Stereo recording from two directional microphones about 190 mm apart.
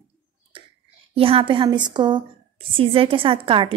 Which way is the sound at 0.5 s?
30° right (ahead or behind).